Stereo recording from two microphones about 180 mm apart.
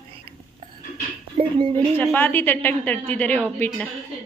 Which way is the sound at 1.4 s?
30° right (ahead or behind).